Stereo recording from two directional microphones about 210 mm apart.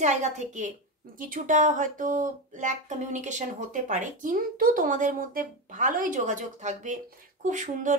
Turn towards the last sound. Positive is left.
turn(degrees=-35)  # may be behind; listen again after turning